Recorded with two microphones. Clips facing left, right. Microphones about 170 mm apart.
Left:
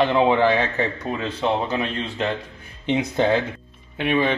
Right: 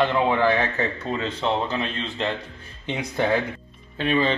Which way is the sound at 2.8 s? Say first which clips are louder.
Left 5 dB; 20° left (ahead or behind).